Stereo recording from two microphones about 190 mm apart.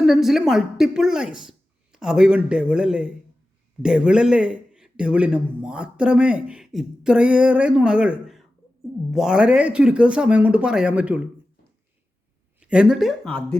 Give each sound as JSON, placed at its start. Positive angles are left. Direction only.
{"t": 0.0, "sound": "speech", "side_deg": 0}
{"t": 12.5, "sound": "speech", "side_deg": -5}